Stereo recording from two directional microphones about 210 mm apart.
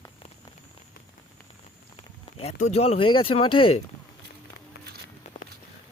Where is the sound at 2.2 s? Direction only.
30° left (ahead or behind).